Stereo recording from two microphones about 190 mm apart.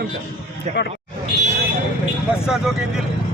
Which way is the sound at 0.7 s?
35° right (ahead or behind).